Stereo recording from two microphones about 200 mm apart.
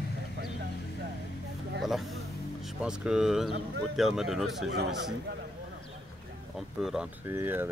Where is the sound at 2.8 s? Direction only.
5° right (ahead or behind).